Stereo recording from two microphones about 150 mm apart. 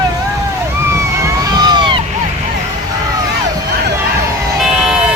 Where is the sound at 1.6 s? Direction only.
25° right (ahead or behind).